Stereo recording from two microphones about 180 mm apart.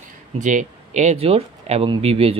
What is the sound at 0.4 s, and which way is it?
Speech, 45° right (ahead or behind).